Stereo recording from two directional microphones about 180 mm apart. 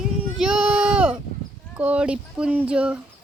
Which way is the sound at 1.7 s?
10° right (ahead or behind).